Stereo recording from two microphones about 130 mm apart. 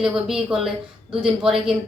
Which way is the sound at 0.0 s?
5° right (ahead or behind).